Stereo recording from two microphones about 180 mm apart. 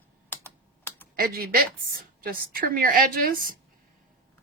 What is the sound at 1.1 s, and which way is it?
A woman's voice, 55° right (ahead or behind).